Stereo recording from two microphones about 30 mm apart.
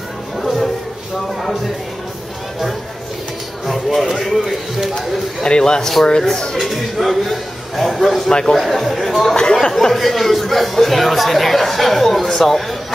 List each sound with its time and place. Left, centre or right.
0.4 s music: centre
3.6 s a sound: centre
5.4 s speech: left
5.8 s speech: centre
6.6 s speech: centre
8.3 s speech: left
8.5 s speech: centre
9.3 s speech: left
9.6 s speech: centre
9.9 s speech: centre